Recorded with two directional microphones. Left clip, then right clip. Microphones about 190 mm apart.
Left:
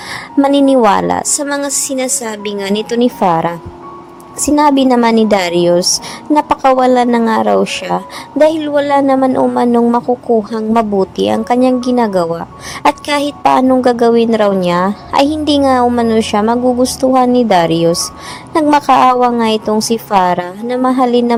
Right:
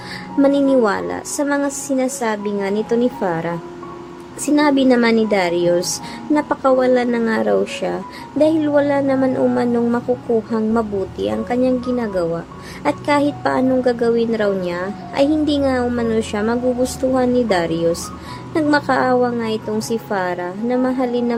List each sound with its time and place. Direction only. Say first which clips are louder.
0.1 s a woman's voice: left 4 dB; 35° left (ahead or behind)